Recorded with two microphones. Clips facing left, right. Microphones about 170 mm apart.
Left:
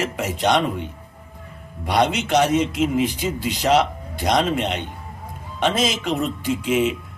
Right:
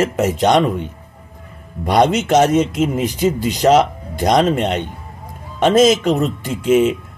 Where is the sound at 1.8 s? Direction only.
45° right (ahead or behind).